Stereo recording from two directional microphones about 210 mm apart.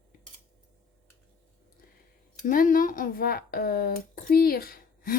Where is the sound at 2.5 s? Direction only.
40° left (ahead or behind).